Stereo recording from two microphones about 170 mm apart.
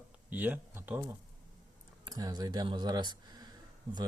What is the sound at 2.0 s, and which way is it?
Speech, 25° right (ahead or behind).